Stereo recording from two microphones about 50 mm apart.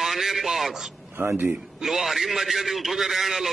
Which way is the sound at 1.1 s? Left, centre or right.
Right.